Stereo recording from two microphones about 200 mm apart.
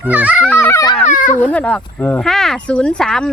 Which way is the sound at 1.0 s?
40° left (ahead or behind).